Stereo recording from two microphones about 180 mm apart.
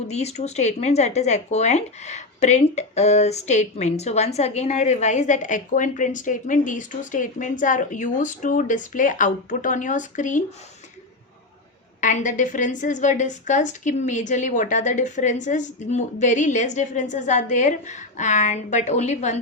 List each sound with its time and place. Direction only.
0.1 s speech: 35° left (ahead or behind)
11.9 s a woman's voice: 45° left (ahead or behind)